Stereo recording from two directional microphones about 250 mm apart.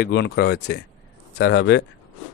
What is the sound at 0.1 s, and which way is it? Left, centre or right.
Speech, left.